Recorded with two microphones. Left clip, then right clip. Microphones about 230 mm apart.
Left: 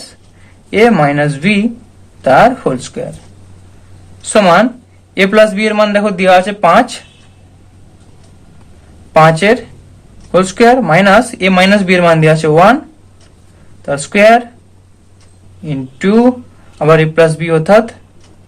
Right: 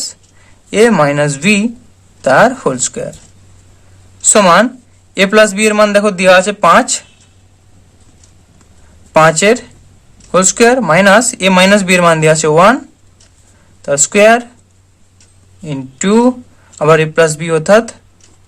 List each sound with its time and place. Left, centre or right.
0.7 s a man's voice: right
4.2 s a man's voice: right
9.1 s speech: right
13.8 s speech: right
15.6 s speech: right